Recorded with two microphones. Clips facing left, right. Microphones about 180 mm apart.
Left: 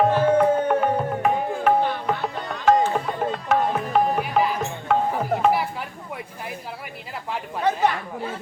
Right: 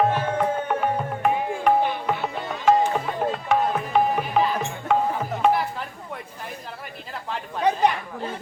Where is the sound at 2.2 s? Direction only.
5° right (ahead or behind).